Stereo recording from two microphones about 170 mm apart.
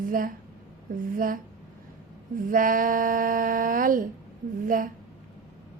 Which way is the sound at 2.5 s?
55° right (ahead or behind).